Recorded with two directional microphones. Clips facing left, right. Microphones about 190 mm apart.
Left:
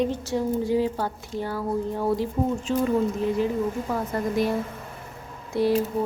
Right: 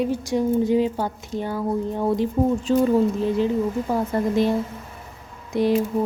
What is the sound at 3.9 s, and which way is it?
A woman's voice, 25° right (ahead or behind).